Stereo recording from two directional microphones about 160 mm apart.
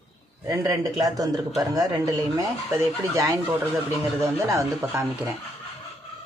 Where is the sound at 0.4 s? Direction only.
20° right (ahead or behind).